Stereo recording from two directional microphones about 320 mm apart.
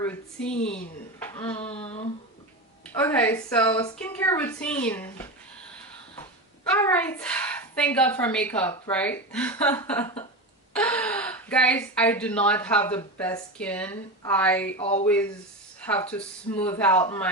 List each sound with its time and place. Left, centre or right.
0.0 s a woman's voice: centre
1.7 s a sound: centre
2.8 s a woman's voice: centre
6.7 s a woman's voice: centre
14.8 s speech: centre
15.0 s a woman's voice: centre